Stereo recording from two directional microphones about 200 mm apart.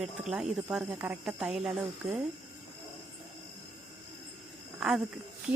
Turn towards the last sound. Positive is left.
turn(degrees=0)  # may be behind; listen again after turning